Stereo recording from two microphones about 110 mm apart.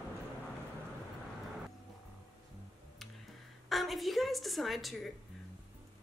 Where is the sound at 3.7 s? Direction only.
Centre (ahead or behind).